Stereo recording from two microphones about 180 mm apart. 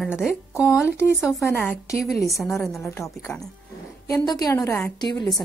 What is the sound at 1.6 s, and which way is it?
Speech, 10° left (ahead or behind).